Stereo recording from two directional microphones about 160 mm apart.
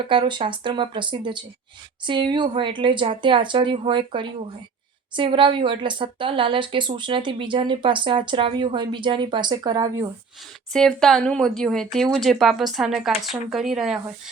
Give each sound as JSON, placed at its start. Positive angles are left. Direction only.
{"t": 0.0, "sound": "a woman's voice", "side_deg": -30}
{"t": 10.7, "sound": "speech", "side_deg": 5}